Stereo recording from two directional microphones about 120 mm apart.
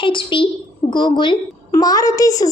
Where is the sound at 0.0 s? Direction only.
45° left (ahead or behind).